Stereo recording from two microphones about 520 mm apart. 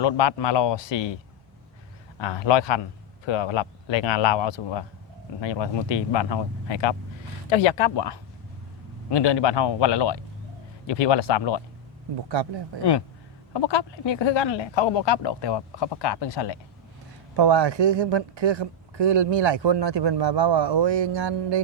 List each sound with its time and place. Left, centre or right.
0.0 s speech: left
2.1 s speech: left
13.5 s speech: left
17.3 s a woman's voice: right